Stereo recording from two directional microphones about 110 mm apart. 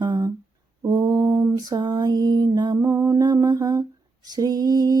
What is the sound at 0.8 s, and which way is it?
Mantra, 35° right (ahead or behind).